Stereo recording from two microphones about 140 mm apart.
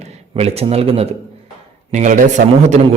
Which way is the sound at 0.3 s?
45° right (ahead or behind).